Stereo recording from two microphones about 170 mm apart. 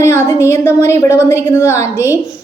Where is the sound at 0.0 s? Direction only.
15° left (ahead or behind).